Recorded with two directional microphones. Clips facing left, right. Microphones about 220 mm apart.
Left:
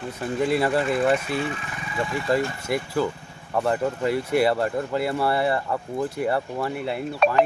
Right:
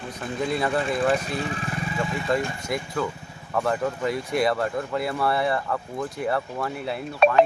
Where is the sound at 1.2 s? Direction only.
40° right (ahead or behind).